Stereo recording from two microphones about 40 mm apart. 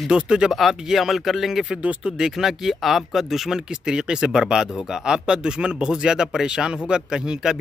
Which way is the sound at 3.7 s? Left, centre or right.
Centre.